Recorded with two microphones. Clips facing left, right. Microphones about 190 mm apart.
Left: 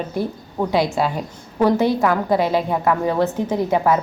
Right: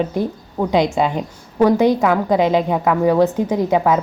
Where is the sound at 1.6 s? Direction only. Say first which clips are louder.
Right 3 dB; 15° right (ahead or behind).